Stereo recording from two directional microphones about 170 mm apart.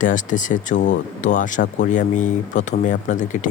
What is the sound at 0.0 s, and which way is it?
Speech, 50° left (ahead or behind).